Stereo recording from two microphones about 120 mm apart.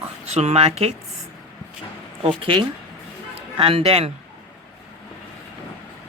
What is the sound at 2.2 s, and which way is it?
Speech, 45° right (ahead or behind).